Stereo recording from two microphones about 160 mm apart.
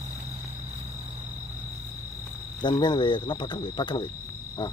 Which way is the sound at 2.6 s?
30° left (ahead or behind).